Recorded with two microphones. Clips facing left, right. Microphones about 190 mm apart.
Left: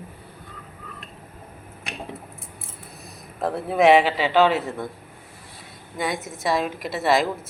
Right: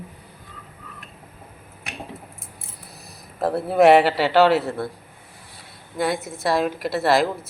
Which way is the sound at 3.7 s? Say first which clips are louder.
Right 2 dB; centre (ahead or behind).